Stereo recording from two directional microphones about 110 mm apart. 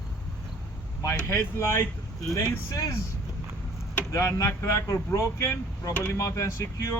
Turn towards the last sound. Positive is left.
turn(degrees=25)  # may be behind; listen again after turning